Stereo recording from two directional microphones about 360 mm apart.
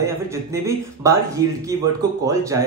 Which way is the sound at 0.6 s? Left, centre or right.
Centre.